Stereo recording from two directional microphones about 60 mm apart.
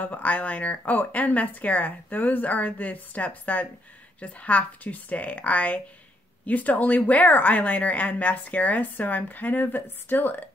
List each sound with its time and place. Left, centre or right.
0.0 s speech: left